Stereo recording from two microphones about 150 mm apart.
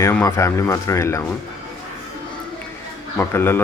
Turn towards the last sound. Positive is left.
turn(degrees=15)  # may be behind; listen again after turning